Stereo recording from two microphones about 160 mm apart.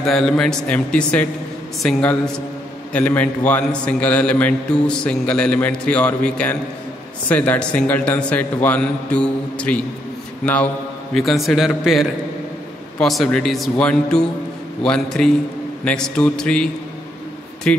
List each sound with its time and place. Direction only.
0.0 s a man's voice: 5° left (ahead or behind)